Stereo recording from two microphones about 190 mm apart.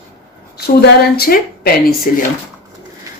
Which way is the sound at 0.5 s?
55° left (ahead or behind).